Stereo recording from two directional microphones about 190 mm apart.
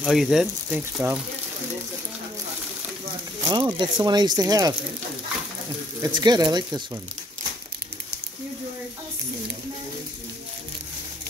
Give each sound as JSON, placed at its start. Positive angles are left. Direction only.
{"t": 0.0, "sound": "speech", "side_deg": 0}
{"t": 3.4, "sound": "speech", "side_deg": -25}
{"t": 5.9, "sound": "speech", "side_deg": -20}